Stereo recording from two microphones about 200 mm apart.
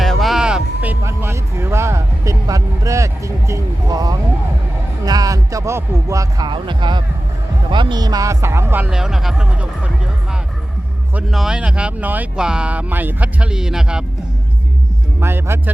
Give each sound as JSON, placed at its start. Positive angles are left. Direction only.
{"t": 0.0, "sound": "music", "side_deg": 0}
{"t": 5.0, "sound": "speech", "side_deg": -20}
{"t": 11.1, "sound": "speech", "side_deg": -5}
{"t": 15.2, "sound": "speech", "side_deg": -10}